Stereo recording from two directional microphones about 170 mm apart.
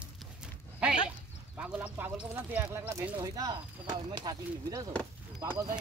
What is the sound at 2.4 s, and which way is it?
Speech, 10° right (ahead or behind).